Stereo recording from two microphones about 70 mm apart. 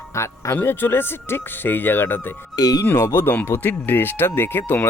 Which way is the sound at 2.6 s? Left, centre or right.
Left.